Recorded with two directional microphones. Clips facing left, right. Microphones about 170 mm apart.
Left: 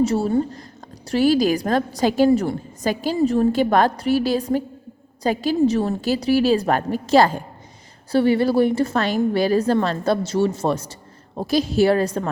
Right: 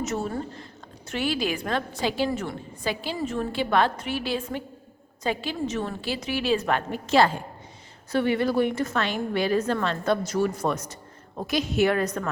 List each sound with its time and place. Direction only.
0.0 s a woman's voice: 30° left (ahead or behind)